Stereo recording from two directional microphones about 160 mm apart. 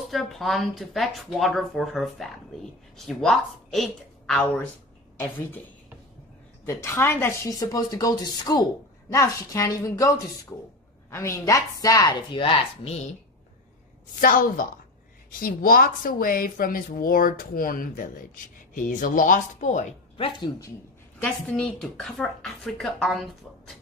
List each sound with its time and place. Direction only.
0.1 s a woman's voice: centre (ahead or behind)
6.6 s a woman's voice: 15° left (ahead or behind); by 13.0 s 35° left (ahead or behind)
14.2 s speech: 60° left (ahead or behind)
20.2 s a woman's voice: 30° left (ahead or behind)
21.2 s speech: 5° left (ahead or behind)